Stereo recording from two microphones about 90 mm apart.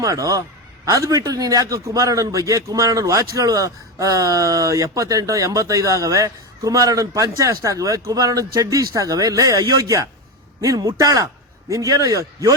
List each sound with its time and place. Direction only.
0.0 s a man's voice: 40° right (ahead or behind)